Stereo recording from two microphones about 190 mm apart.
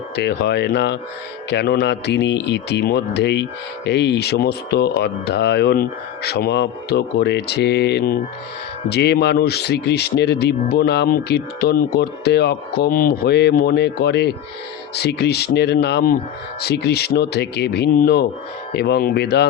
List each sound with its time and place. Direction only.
0.2 s speech: 65° left (ahead or behind)